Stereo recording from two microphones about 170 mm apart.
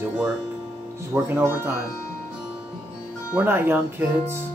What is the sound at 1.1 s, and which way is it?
Speech, 15° right (ahead or behind).